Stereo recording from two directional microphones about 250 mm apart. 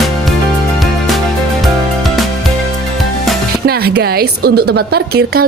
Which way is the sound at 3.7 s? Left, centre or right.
Right.